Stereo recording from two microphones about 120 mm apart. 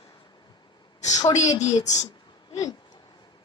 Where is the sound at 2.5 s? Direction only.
30° left (ahead or behind).